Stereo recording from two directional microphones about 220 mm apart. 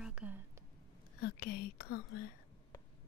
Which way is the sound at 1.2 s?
45° left (ahead or behind).